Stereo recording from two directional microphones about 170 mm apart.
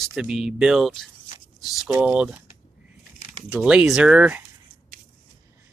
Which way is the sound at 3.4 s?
5° right (ahead or behind).